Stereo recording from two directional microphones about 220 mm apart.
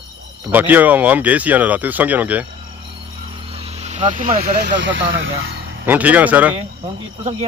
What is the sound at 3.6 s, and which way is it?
Speech, 30° right (ahead or behind).